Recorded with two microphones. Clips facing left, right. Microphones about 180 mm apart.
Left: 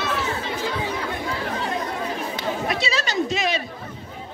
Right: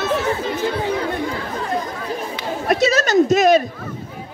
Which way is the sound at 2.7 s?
45° right (ahead or behind).